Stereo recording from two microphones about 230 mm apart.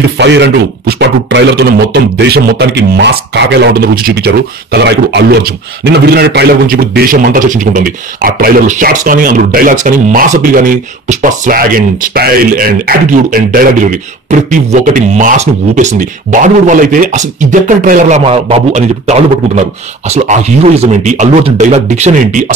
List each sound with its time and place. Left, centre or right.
0.2 s a man's voice: right